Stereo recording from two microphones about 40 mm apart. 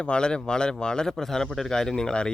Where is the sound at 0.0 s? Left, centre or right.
Left.